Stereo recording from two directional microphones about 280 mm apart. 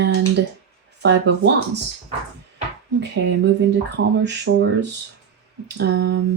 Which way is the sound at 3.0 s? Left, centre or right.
Right.